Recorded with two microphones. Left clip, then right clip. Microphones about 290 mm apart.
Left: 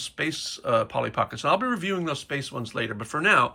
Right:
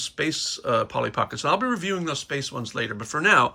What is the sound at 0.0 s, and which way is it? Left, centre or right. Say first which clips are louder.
Speech: right 3 dB; centre.